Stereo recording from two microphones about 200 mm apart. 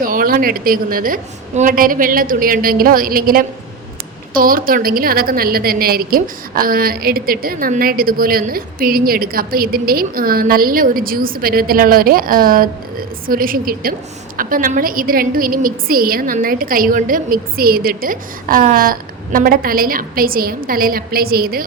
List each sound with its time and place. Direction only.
0.0 s a woman's voice: 45° right (ahead or behind)